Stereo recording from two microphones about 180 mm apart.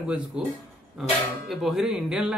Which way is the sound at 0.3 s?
5° right (ahead or behind).